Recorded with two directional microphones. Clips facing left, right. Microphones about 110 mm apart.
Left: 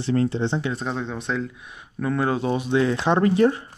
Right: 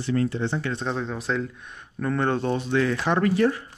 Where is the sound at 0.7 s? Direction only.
Centre (ahead or behind); by 3.6 s 25° left (ahead or behind).